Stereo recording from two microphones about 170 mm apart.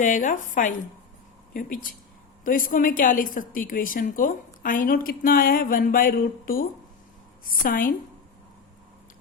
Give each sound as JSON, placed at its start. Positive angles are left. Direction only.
{"t": 0.0, "sound": "a woman's voice", "side_deg": 50}